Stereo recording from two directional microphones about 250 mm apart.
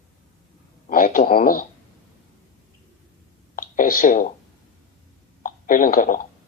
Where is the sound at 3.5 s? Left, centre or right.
Left.